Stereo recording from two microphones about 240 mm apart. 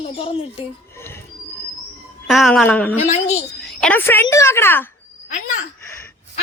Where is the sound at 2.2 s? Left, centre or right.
Centre.